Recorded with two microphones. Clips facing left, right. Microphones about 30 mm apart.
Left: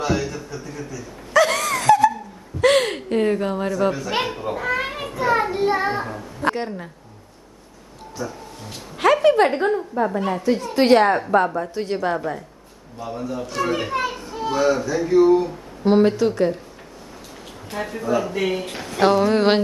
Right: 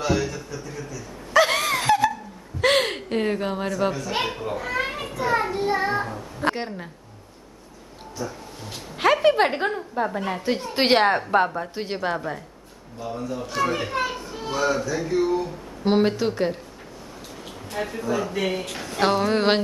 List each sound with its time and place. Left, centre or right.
0.0 s speech: centre
1.3 s wail: centre
2.6 s gasp: centre
3.9 s a child's voice: centre
6.4 s speech: centre
8.2 s a sound: centre
9.8 s speech: centre
10.4 s a woman's voice: right
11.4 s speech: centre
11.7 s speech: centre
12.2 s speech: centre
15.8 s speech: centre
17.7 s speech: centre